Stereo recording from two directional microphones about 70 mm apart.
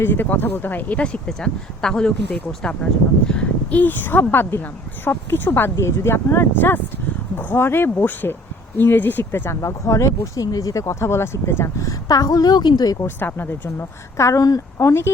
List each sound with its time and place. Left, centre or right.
0.0 s a woman's voice: left
9.6 s speech: left
11.9 s a woman's voice: left
13.1 s a woman's voice: left